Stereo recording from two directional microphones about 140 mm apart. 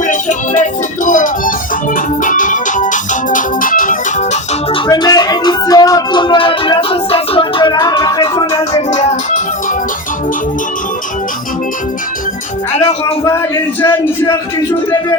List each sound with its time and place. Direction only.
0.0 s music: 65° left (ahead or behind)
4.9 s music: 30° left (ahead or behind)
8.9 s music: 55° left (ahead or behind)
12.7 s speech: 50° left (ahead or behind)
13.8 s a man's voice: 15° left (ahead or behind)